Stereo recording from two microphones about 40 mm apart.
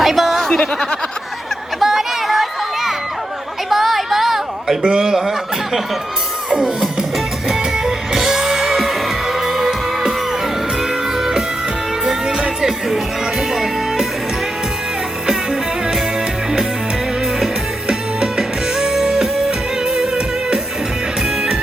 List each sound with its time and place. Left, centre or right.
0.0 s a sound: centre
1.8 s a sound: centre
3.7 s music: centre
4.9 s speech: centre
6.5 s music: centre
11.2 s music: centre
17.8 s music: centre